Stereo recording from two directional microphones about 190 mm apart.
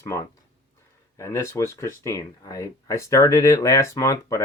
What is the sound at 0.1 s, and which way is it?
Speech, 15° left (ahead or behind).